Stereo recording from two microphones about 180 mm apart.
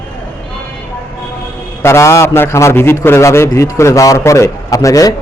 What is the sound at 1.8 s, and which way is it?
A man's voice, 15° left (ahead or behind).